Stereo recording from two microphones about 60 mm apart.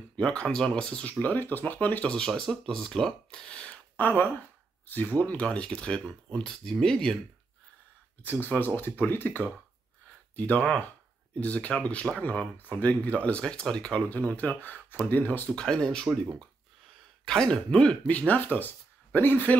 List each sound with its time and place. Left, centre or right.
0.2 s speech: centre
1.2 s speech: left
2.0 s speech: centre
3.3 s speech: centre
5.2 s speech: left
8.2 s speech: left; by 14.0 s centre
14.0 s speech: left
15.5 s speech: centre
17.3 s speech: centre
18.1 s speech: left